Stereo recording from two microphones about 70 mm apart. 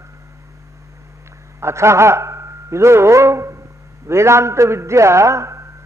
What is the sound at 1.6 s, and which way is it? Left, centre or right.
A man's voice, right.